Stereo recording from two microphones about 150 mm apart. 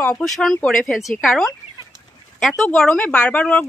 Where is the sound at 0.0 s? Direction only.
5° left (ahead or behind).